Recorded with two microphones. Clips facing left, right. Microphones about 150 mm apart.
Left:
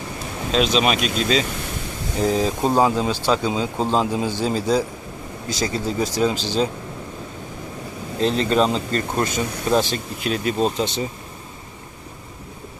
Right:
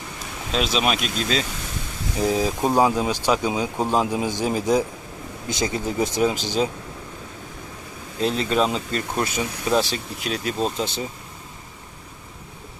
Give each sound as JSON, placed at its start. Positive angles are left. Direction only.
{"t": 0.5, "sound": "speech", "side_deg": 0}
{"t": 8.2, "sound": "speech", "side_deg": -5}